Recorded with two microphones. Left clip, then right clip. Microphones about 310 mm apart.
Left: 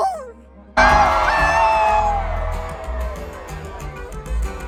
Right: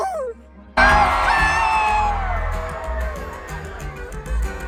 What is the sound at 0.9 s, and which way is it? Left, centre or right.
Music, left.